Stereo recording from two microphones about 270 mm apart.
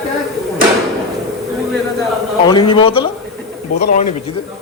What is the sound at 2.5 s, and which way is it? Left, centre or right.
A man's voice, centre.